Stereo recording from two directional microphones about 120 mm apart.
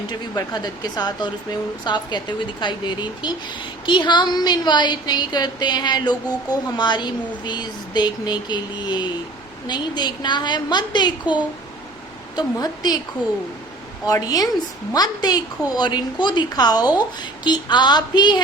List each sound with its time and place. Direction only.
0.1 s a woman's voice: 35° left (ahead or behind)
12.4 s a woman's voice: 35° left (ahead or behind)
14.1 s a woman's voice: 30° left (ahead or behind)